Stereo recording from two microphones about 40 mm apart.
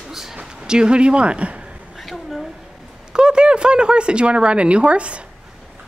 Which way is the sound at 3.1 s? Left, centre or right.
Right.